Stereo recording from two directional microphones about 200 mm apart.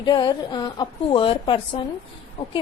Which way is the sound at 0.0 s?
20° left (ahead or behind).